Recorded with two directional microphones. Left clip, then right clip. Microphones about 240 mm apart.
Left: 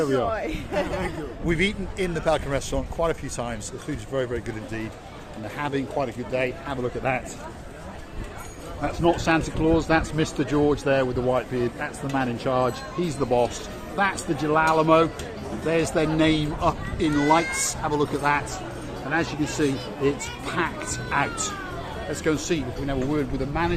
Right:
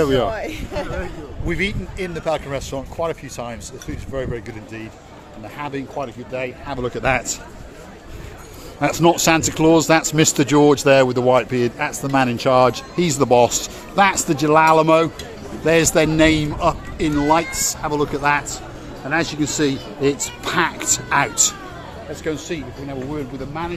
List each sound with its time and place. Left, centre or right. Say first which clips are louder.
0.0 s speech: right 5 dB; right
1.5 s speech: right 2 dB; centre
6.7 s speech: right 6 dB; right
8.8 s speech: right 7 dB; right
19.1 s speech: right 5 dB; right
22.1 s speech: left 1 dB; centre